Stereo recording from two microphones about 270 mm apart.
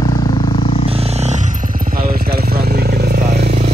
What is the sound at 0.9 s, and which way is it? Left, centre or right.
Vehicle, right.